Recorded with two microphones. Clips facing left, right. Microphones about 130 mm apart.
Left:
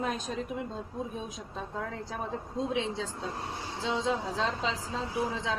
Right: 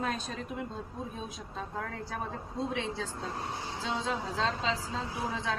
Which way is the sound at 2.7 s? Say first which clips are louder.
Left 3 dB; 20° left (ahead or behind).